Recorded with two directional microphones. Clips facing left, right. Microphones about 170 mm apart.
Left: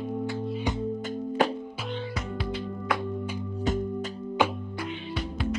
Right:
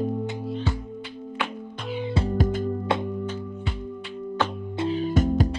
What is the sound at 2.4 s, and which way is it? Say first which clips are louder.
Music: right 7 dB; 45° right (ahead or behind).